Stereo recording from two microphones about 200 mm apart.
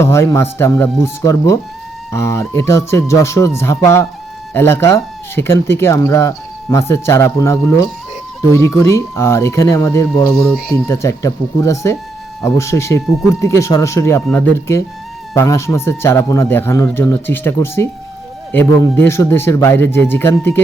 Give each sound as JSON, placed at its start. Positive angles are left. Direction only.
{"t": 0.0, "sound": "speech", "side_deg": 15}